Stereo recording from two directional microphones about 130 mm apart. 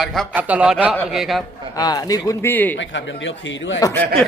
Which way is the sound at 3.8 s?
30° left (ahead or behind).